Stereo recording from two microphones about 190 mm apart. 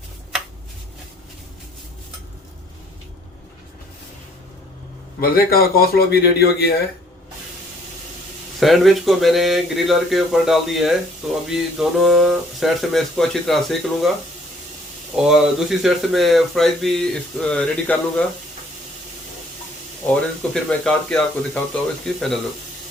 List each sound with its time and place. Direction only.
5.2 s speech: 55° left (ahead or behind)
8.5 s speech: centre (ahead or behind)
15.1 s speech: 5° right (ahead or behind)
20.1 s speech: 5° left (ahead or behind)